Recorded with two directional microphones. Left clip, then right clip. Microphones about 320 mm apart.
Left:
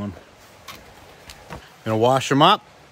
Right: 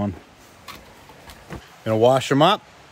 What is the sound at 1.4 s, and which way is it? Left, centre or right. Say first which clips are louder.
Speech: right 2 dB; centre.